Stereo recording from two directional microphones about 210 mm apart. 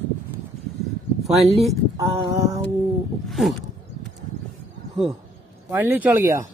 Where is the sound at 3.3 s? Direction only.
Centre (ahead or behind).